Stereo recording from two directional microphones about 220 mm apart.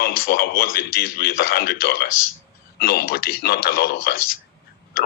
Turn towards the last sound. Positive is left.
turn(degrees=40)  # may be behind; listen again after turning